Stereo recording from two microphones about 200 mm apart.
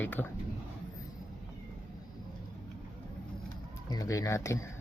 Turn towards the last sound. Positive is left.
turn(degrees=15)  # may be behind; listen again after turning